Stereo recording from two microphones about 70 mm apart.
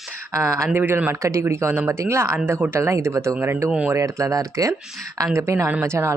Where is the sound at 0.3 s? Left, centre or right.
Right.